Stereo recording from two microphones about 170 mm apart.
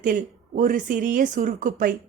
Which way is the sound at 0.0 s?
50° right (ahead or behind).